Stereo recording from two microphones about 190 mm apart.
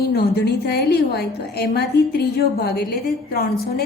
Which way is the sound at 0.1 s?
55° left (ahead or behind).